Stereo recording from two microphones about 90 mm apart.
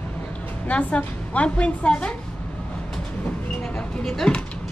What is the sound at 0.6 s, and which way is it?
A woman's voice, 15° left (ahead or behind).